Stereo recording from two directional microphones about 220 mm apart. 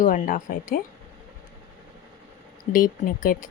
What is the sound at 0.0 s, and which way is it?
Speech, 40° left (ahead or behind).